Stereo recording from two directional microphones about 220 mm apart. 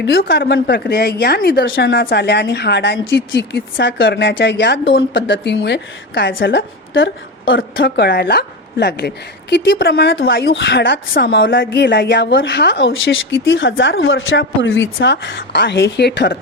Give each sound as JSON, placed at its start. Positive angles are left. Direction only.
{"t": 0.0, "sound": "a woman's voice", "side_deg": 45}